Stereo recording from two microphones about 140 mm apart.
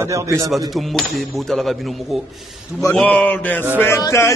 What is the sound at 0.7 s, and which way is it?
A man's voice, centre (ahead or behind).